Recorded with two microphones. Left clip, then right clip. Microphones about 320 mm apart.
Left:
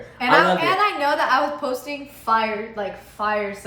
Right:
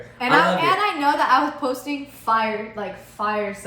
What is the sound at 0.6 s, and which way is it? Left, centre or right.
A woman's voice, centre.